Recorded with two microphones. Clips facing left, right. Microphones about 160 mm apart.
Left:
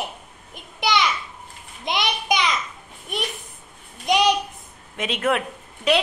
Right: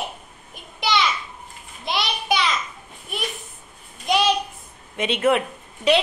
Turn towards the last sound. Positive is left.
turn(degrees=0)  # may be behind; listen again after turning